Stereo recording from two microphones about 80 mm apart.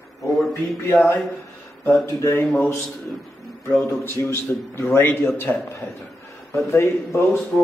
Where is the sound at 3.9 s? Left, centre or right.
Left.